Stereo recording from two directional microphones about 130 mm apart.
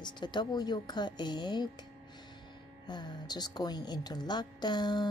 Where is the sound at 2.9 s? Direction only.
35° left (ahead or behind).